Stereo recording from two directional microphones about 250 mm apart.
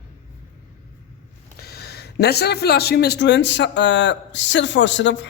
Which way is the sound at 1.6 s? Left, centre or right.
Left.